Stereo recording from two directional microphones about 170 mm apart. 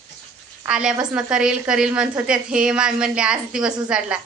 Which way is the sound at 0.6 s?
5° right (ahead or behind).